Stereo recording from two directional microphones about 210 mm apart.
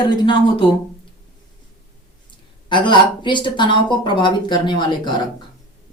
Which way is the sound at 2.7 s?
20° left (ahead or behind).